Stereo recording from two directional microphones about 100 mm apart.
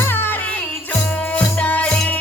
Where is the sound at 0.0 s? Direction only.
20° left (ahead or behind).